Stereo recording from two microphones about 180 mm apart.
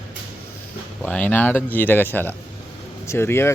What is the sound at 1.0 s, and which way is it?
Speech, 10° left (ahead or behind).